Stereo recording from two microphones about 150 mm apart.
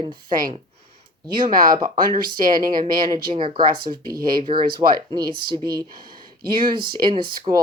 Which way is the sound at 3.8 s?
75° right (ahead or behind).